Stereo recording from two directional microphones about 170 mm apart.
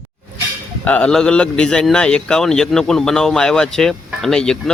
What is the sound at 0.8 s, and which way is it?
A man's voice, 5° left (ahead or behind).